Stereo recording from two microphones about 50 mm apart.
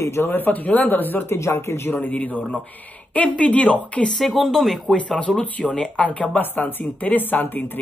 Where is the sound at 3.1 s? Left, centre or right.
Left.